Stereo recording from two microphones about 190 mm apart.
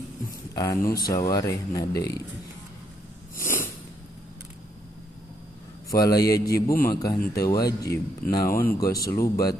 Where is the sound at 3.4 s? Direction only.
10° left (ahead or behind).